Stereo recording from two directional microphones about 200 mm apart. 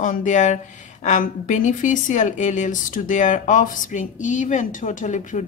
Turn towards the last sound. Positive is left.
turn(degrees=40)  # may be behind; listen again after turning